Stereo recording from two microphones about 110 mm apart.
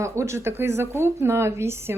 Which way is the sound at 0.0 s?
25° right (ahead or behind).